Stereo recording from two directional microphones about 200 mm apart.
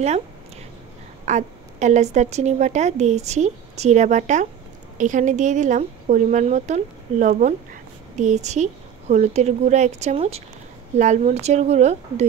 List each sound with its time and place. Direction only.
1.2 s a woman's voice: 35° right (ahead or behind)